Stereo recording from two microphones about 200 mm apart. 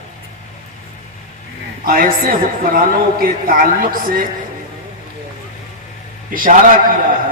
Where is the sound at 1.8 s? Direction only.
45° right (ahead or behind).